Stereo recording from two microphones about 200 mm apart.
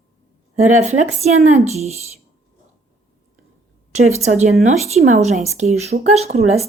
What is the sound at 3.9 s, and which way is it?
Speech, 35° right (ahead or behind).